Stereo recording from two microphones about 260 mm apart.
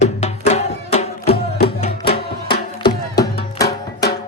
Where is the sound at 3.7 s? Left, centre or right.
Left.